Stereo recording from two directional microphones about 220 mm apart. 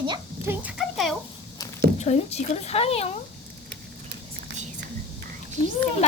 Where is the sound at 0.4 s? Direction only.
5° right (ahead or behind).